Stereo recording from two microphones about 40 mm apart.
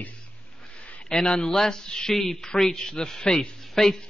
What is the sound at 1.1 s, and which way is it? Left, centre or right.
A man's voice, centre.